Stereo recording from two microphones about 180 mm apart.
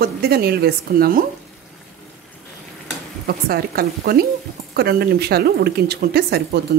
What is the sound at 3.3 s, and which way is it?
Stir, 60° right (ahead or behind).